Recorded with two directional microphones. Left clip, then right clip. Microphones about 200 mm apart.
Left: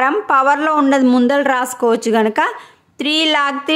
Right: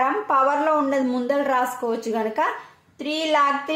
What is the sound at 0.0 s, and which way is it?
A woman's voice, 45° left (ahead or behind).